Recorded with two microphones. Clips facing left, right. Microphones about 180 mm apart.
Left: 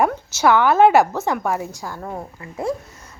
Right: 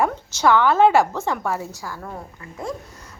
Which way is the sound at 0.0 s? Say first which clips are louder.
Left 2 dB; 10° left (ahead or behind).